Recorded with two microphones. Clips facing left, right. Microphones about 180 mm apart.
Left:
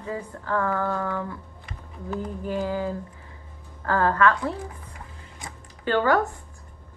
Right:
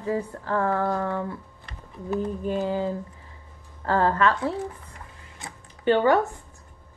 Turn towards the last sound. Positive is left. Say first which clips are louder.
# right 2 dB
turn(degrees=-20)  # may be behind; listen again after turning